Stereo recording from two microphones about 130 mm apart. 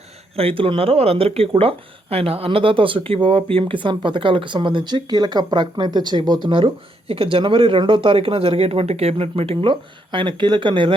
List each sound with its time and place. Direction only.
0.3 s speech: 45° right (ahead or behind)